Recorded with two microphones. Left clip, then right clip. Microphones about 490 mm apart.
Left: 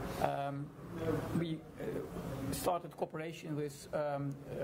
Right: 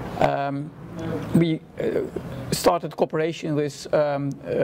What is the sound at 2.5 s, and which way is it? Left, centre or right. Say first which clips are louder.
Speech: right 16 dB; right.